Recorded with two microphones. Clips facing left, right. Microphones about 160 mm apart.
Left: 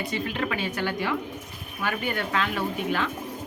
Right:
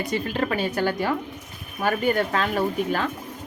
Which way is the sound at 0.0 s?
40° right (ahead or behind).